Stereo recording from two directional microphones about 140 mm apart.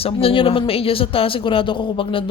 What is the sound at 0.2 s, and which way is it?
Speech, 40° left (ahead or behind).